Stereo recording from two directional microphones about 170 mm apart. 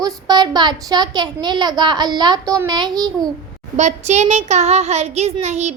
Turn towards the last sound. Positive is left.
turn(degrees=-40)  # may be behind; listen again after turning